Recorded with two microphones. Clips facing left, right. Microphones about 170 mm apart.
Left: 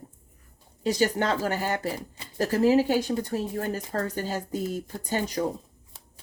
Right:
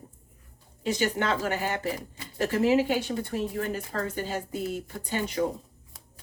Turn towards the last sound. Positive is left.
turn(degrees=40)  # may be behind; listen again after turning